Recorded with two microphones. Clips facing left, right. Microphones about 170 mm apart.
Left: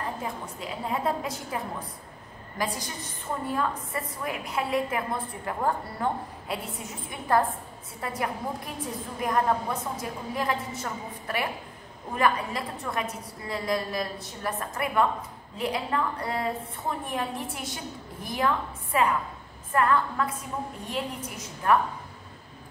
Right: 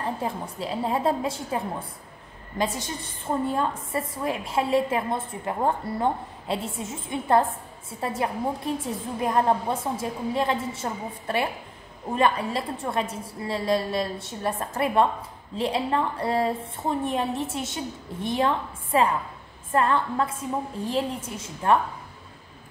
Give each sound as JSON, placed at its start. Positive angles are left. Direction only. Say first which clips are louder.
{"t": 0.2, "sound": "a woman's voice", "louder": "right 5 dB", "side_deg": -30}